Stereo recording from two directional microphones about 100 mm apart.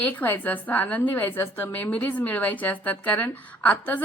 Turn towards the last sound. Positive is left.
turn(degrees=15)  # may be behind; listen again after turning